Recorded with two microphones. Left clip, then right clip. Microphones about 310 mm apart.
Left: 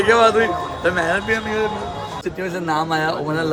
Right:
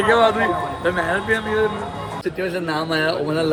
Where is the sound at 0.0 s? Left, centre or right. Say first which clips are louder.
Left 2 dB; left.